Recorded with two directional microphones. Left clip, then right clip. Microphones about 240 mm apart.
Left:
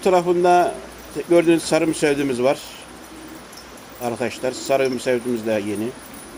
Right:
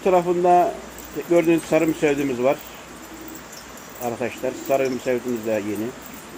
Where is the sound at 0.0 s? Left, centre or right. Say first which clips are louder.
Left 2 dB; centre.